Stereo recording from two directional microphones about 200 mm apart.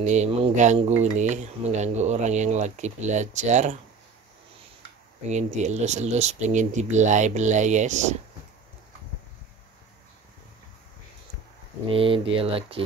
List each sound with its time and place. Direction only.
0.0 s speech: 35° right (ahead or behind)
5.3 s speech: 35° right (ahead or behind)
11.9 s speech: 25° right (ahead or behind)